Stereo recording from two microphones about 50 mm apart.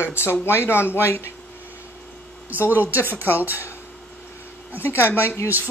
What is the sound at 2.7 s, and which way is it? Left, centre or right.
Speech, right.